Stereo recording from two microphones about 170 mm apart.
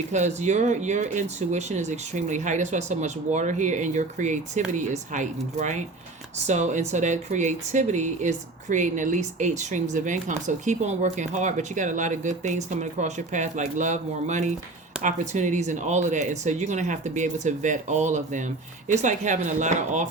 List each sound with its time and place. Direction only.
0.1 s speech: 40° right (ahead or behind)